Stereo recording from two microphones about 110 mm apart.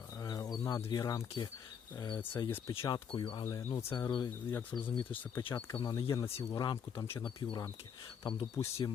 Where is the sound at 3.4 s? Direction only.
25° left (ahead or behind).